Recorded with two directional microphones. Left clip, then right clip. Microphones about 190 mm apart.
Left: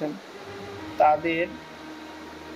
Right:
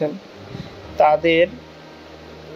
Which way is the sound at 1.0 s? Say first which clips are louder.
Right 6 dB; 45° right (ahead or behind).